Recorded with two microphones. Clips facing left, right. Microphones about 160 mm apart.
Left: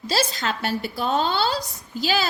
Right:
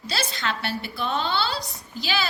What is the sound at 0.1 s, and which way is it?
A woman's voice, 40° left (ahead or behind).